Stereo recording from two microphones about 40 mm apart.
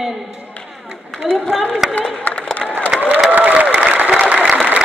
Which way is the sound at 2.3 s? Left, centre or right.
Left.